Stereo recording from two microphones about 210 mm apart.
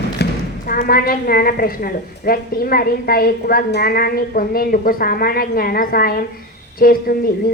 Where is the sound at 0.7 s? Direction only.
45° left (ahead or behind).